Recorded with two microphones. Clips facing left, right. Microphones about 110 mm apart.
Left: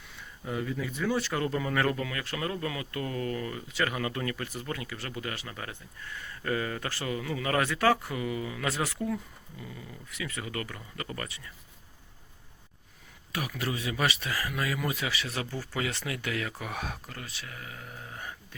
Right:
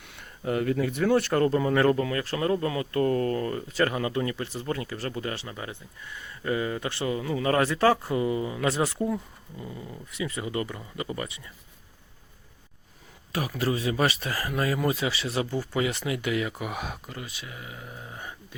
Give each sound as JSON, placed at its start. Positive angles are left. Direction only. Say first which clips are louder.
{"t": 0.0, "sound": "speech", "louder": "right 8 dB", "side_deg": -65}
{"t": 4.0, "sound": "speech", "louder": "right 4 dB", "side_deg": -25}
{"t": 13.3, "sound": "speech", "louder": "right 6 dB", "side_deg": -35}